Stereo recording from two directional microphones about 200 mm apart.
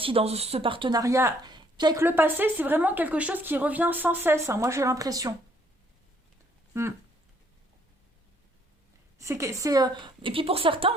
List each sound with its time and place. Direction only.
0.0 s a woman's voice: 30° right (ahead or behind)
9.1 s a woman's voice: 15° right (ahead or behind)